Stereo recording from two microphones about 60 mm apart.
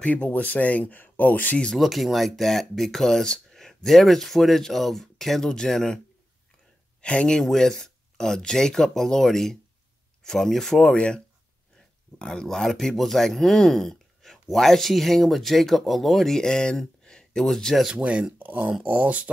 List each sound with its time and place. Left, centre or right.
0.0 s speech: left
1.8 s speech: centre
7.0 s speech: centre
17.9 s speech: centre